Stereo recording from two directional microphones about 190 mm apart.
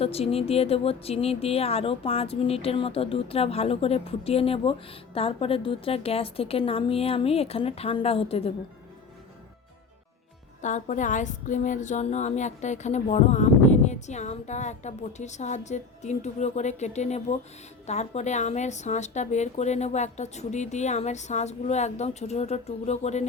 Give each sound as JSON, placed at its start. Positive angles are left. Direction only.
{"t": 0.0, "sound": "speech", "side_deg": 30}
{"t": 10.6, "sound": "speech", "side_deg": 40}